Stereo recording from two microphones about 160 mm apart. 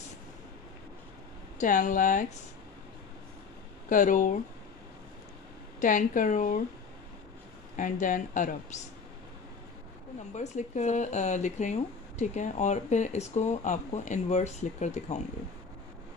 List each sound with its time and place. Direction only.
1.6 s speech: 50° left (ahead or behind)
3.9 s speech: 55° left (ahead or behind)
5.8 s speech: 55° left (ahead or behind)
7.7 s speech: 55° left (ahead or behind)
10.3 s speech: 45° left (ahead or behind)